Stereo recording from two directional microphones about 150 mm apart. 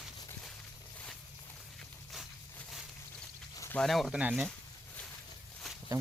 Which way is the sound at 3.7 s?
Centre (ahead or behind).